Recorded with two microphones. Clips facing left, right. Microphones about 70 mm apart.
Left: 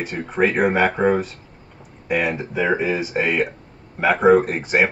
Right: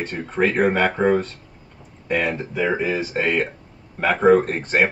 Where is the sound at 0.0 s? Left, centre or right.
Centre.